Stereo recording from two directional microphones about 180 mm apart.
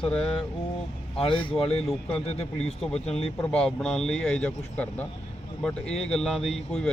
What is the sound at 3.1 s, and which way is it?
Speech, 35° left (ahead or behind).